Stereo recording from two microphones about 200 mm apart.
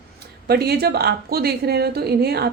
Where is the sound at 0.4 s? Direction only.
50° right (ahead or behind).